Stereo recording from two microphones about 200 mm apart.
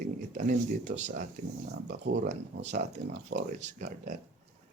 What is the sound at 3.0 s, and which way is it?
Speech, 55° right (ahead or behind).